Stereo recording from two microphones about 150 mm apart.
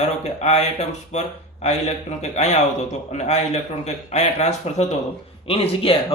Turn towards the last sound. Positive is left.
turn(degrees=40)  # may be behind; listen again after turning